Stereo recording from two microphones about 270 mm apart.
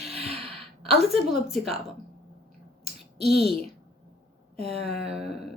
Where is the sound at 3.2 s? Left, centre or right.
Centre.